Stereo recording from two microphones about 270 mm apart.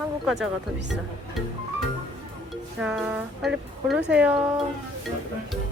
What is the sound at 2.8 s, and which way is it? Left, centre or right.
Speech, centre.